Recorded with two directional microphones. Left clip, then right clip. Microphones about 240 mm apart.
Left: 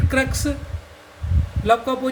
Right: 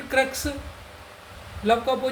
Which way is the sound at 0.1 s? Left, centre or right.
Left.